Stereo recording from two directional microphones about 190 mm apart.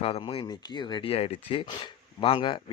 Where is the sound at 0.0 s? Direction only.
30° left (ahead or behind).